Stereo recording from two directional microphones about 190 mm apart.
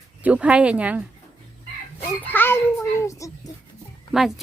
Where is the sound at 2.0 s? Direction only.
10° left (ahead or behind).